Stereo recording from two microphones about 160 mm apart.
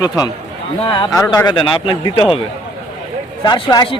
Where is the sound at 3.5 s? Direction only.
30° left (ahead or behind).